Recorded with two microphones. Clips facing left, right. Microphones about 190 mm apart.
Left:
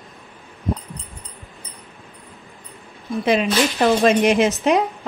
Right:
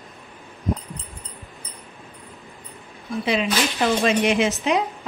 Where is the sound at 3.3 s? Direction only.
45° left (ahead or behind).